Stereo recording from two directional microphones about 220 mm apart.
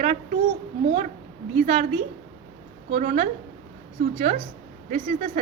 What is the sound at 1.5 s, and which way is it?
Speech, 35° right (ahead or behind).